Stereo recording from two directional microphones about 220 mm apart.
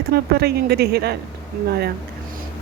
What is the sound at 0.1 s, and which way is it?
Speech, 45° right (ahead or behind).